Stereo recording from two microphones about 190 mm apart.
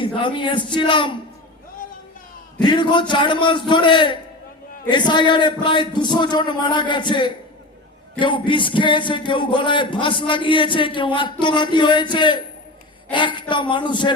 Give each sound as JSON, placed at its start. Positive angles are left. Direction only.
{"t": 0.0, "sound": "speech", "side_deg": 25}
{"t": 2.6, "sound": "speech", "side_deg": 25}